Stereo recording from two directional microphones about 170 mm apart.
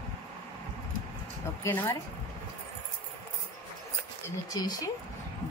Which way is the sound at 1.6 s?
15° left (ahead or behind).